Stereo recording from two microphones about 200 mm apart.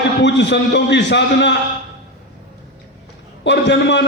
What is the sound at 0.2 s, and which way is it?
A man's voice, 60° left (ahead or behind).